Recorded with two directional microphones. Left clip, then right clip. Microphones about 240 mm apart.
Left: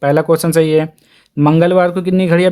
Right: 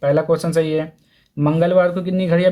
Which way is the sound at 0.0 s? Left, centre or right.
Left.